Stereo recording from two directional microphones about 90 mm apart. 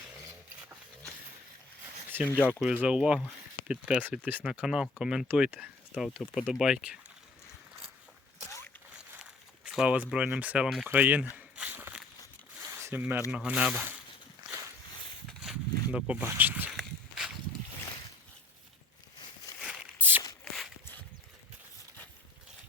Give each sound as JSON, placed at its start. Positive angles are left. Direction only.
{"t": 2.2, "sound": "speech", "side_deg": 15}
{"t": 2.5, "sound": "speech", "side_deg": -10}
{"t": 5.9, "sound": "speech", "side_deg": -5}
{"t": 9.6, "sound": "speech", "side_deg": -15}
{"t": 11.3, "sound": "walk", "side_deg": -15}
{"t": 12.7, "sound": "zipper", "side_deg": -20}
{"t": 13.3, "sound": "speech", "side_deg": -10}
{"t": 15.4, "sound": "zipper", "side_deg": -10}
{"t": 16.2, "sound": "a sound", "side_deg": -25}
{"t": 16.7, "sound": "a sound", "side_deg": -5}
{"t": 20.0, "sound": "walk", "side_deg": -20}